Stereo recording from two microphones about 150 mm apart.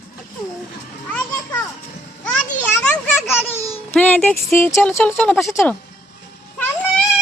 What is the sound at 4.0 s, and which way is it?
A woman's voice, 10° left (ahead or behind).